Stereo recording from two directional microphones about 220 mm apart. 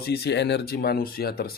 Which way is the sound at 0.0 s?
45° left (ahead or behind).